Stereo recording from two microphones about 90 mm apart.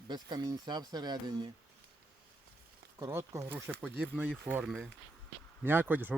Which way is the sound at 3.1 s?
30° right (ahead or behind).